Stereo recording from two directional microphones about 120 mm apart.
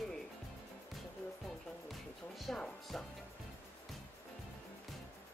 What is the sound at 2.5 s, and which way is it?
Speech, 5° left (ahead or behind).